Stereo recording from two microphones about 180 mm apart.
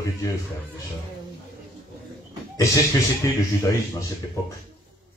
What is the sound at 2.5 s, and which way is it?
Speech, 15° left (ahead or behind).